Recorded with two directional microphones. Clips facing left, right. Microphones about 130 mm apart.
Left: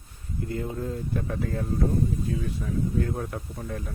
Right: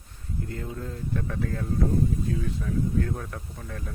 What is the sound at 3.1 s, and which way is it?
Speech, 20° left (ahead or behind).